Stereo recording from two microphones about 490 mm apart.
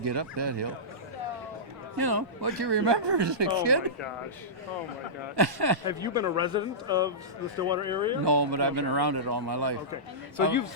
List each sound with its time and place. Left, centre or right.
0.0 s speech: right
2.0 s speech: right
5.4 s speech: right
5.9 s a man's voice: centre
8.2 s speech: right